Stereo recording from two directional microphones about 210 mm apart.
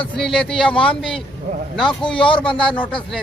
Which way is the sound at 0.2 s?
5° left (ahead or behind).